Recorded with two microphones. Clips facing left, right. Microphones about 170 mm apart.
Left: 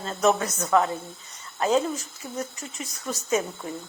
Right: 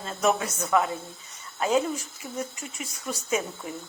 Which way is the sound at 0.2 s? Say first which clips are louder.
Left 2 dB; 10° right (ahead or behind).